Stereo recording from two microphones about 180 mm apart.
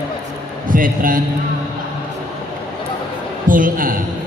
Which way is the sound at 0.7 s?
50° right (ahead or behind).